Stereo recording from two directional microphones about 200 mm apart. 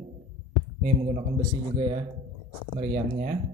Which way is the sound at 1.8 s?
30° right (ahead or behind).